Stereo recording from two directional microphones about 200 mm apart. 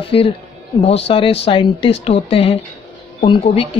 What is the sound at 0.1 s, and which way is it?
Speech, 30° left (ahead or behind).